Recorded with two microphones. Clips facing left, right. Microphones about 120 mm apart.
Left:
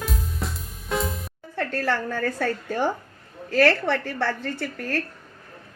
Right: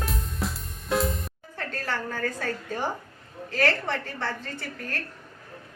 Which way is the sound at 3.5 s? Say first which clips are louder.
Left 6 dB; 90° left.